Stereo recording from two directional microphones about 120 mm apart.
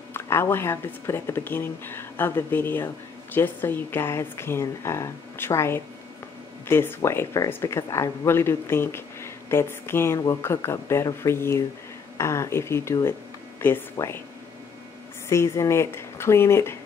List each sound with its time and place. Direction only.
0.1 s speech: 20° left (ahead or behind)
15.2 s speech: 25° left (ahead or behind)